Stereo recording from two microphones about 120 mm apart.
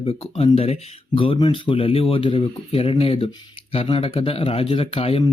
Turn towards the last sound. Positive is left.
turn(degrees=55)  # may be behind; listen again after turning